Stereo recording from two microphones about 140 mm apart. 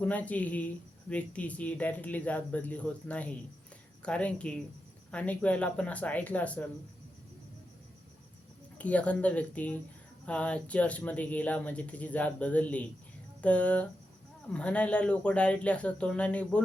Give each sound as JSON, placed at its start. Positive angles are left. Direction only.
{"t": 0.0, "sound": "speech", "side_deg": 10}
{"t": 8.8, "sound": "speech", "side_deg": 10}